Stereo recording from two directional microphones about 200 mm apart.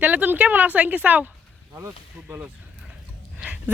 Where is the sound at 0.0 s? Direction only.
10° right (ahead or behind).